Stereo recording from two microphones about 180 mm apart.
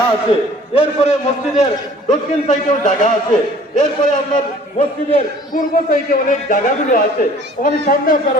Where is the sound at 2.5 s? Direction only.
45° left (ahead or behind).